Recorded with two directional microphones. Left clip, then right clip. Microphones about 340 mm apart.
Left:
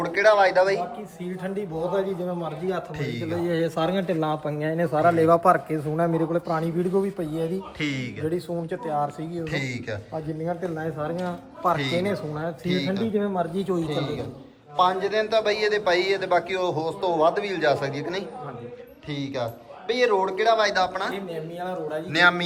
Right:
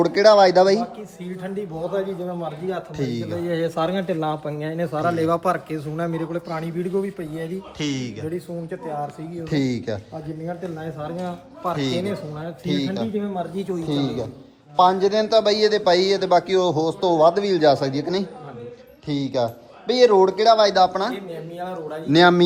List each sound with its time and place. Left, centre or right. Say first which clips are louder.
0.0 s a man's voice: right 5 dB; centre
1.2 s speech: right 1 dB; centre
3.0 s a man's voice: right 3 dB; centre
3.3 s speech: right 1 dB; centre
7.8 s a man's voice: right 4 dB; centre
9.4 s a man's voice: right 6 dB; centre
10.4 s speech: left 2 dB; centre
11.8 s a man's voice: right 1 dB; centre
12.0 s speech: left 1 dB; centre
12.6 s a man's voice: right 3 dB; centre
13.1 s speech: left 2 dB; centre
14.8 s a man's voice: right 5 dB; centre
21.6 s speech: even; centre
22.1 s a man's voice: right 5 dB; centre